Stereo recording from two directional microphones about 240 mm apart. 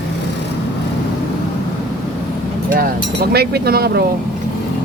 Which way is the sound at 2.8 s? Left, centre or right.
Right.